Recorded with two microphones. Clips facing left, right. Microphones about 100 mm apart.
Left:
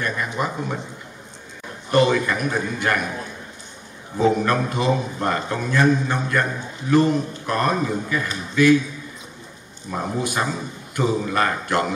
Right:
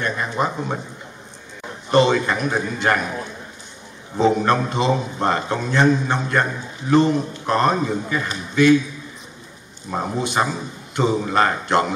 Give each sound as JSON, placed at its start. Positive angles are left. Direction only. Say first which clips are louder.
{"t": 0.0, "sound": "a man's voice", "louder": "right 2 dB", "side_deg": -30}
{"t": 1.9, "sound": "a man's voice", "louder": "right 2 dB", "side_deg": -25}
{"t": 4.2, "sound": "a man's voice", "louder": "right 2 dB", "side_deg": -25}
{"t": 9.8, "sound": "a man's voice", "louder": "right 1 dB", "side_deg": -25}
{"t": 10.5, "sound": "a sound", "louder": "right 1 dB", "side_deg": -25}
{"t": 11.3, "sound": "a man's voice", "louder": "right 3 dB", "side_deg": -25}